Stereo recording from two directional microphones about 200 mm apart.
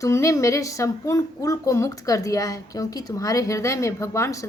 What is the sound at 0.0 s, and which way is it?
Speech, 15° left (ahead or behind).